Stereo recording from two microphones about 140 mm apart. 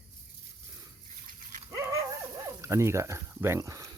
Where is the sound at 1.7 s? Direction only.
20° right (ahead or behind).